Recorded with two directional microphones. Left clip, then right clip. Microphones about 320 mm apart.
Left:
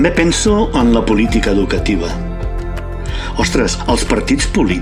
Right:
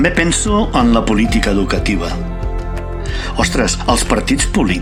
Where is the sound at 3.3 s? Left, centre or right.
Right.